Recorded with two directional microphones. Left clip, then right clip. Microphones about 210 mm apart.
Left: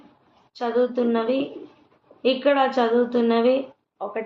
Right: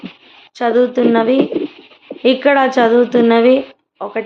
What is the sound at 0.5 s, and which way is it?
A woman's voice, 25° right (ahead or behind).